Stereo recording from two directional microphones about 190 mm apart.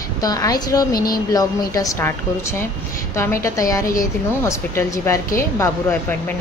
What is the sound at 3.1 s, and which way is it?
A woman's voice, 15° left (ahead or behind).